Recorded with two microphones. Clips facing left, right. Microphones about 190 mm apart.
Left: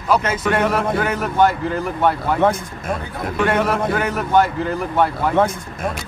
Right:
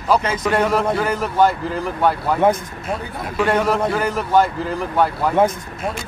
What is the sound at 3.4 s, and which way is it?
A man's voice, centre (ahead or behind).